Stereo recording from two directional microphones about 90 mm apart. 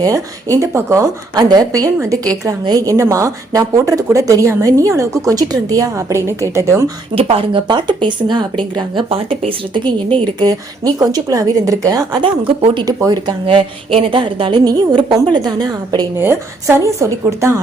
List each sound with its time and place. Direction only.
0.0 s speech: 40° right (ahead or behind)
7.2 s speech: 90° right
7.7 s speech: 55° right (ahead or behind); by 9.8 s 85° right
10.4 s a woman's voice: 45° right (ahead or behind)
12.2 s speech: 65° right (ahead or behind)
12.8 s a woman's voice: 45° right (ahead or behind)
13.5 s speech: 80° right
14.6 s a woman's voice: 45° right (ahead or behind)
16.1 s a woman's voice: 30° right (ahead or behind)